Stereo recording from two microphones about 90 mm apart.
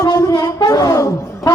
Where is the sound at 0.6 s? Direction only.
45° left (ahead or behind).